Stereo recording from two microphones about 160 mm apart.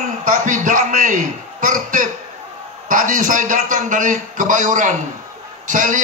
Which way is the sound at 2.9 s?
55° right (ahead or behind).